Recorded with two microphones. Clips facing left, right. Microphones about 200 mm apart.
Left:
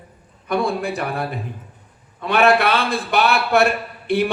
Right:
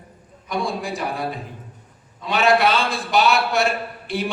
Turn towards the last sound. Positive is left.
turn(degrees=60)  # may be behind; listen again after turning